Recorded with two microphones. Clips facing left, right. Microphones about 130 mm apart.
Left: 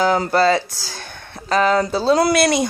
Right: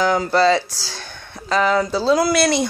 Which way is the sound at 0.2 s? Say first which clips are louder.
Even; 50° left (ahead or behind).